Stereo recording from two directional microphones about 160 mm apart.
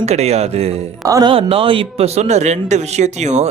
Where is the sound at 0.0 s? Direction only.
40° right (ahead or behind).